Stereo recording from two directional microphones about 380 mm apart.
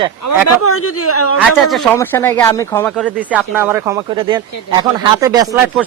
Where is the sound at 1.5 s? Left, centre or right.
Centre.